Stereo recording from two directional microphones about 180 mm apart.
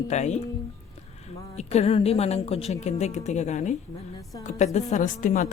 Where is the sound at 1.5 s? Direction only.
35° left (ahead or behind).